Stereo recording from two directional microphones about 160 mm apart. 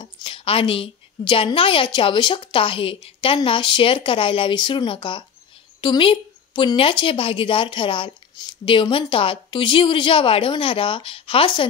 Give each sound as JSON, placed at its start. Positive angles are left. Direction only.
{"t": 0.0, "sound": "a woman's voice", "side_deg": 30}